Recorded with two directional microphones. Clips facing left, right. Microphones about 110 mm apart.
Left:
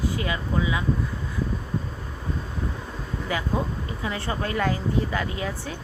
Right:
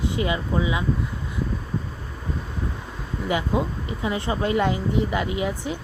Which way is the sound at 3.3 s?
20° right (ahead or behind).